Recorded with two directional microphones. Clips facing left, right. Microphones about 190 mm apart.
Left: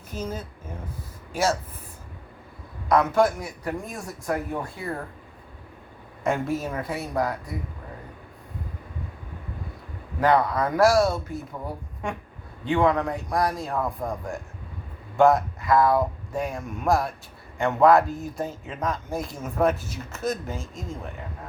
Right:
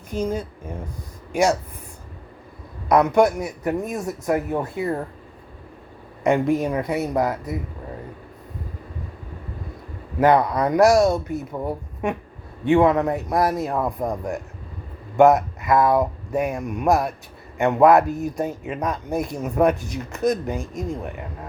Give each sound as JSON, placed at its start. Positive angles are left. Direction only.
{"t": 0.1, "sound": "speech", "side_deg": -10}
{"t": 3.2, "sound": "speech", "side_deg": -20}
{"t": 6.2, "sound": "speech", "side_deg": -15}
{"t": 10.2, "sound": "speech", "side_deg": -20}